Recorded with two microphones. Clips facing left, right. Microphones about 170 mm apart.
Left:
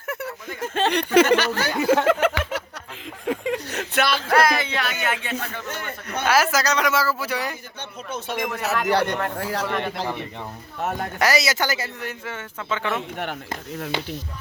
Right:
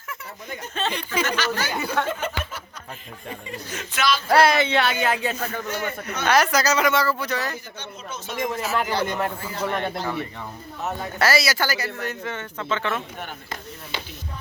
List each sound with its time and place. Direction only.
0.1 s speech: 65° left (ahead or behind)
2.0 s a sound: 90° left; by 4.2 s 60° left (ahead or behind)
4.3 s speech: 30° right (ahead or behind)
5.6 s speech: 55° left (ahead or behind)
6.2 s speech: 5° left (ahead or behind)
7.8 s speech: 60° left (ahead or behind)
9.4 s speech: 85° left
11.2 s speech: 20° left (ahead or behind)
12.0 s speech: 5° left (ahead or behind)